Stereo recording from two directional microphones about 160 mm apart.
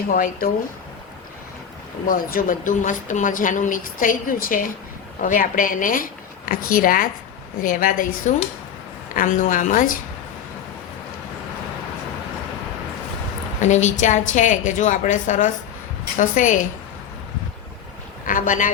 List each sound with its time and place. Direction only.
0.1 s speech: 60° left (ahead or behind)
2.0 s speech: 60° left (ahead or behind)
13.6 s a woman's voice: 45° left (ahead or behind)
18.3 s speech: 55° left (ahead or behind)